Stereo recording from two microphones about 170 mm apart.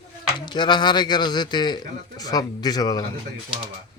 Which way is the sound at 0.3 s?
25° left (ahead or behind).